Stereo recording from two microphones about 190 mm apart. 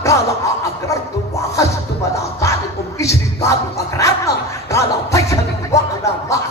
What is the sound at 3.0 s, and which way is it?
Music, 15° left (ahead or behind).